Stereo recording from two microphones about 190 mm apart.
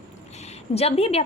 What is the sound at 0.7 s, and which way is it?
Speech, 30° left (ahead or behind).